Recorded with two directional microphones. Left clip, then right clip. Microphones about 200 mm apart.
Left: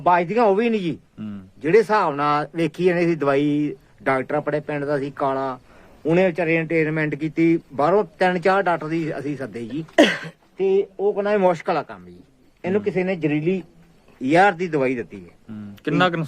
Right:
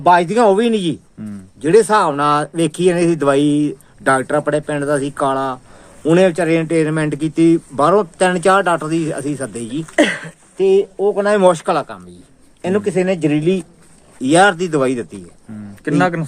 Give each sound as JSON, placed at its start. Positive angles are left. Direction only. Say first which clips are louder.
{"t": 0.0, "sound": "speech", "louder": "right 6 dB", "side_deg": -10}
{"t": 9.9, "sound": "speech", "louder": "right 1 dB", "side_deg": 40}
{"t": 10.6, "sound": "speech", "louder": "right 6 dB", "side_deg": -10}
{"t": 15.8, "sound": "speech", "louder": "right 3 dB", "side_deg": 10}